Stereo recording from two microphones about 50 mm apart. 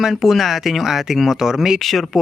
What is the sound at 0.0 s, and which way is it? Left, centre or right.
Speech, centre.